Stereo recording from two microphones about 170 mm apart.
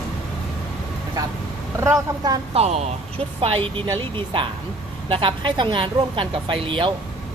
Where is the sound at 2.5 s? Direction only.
40° right (ahead or behind).